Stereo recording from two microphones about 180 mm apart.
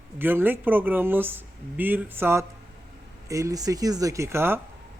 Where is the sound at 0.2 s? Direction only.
10° right (ahead or behind).